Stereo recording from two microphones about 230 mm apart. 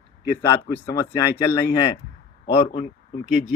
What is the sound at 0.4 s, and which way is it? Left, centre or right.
Speech, centre.